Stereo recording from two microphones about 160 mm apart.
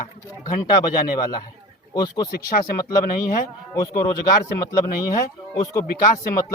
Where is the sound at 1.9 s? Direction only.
25° left (ahead or behind).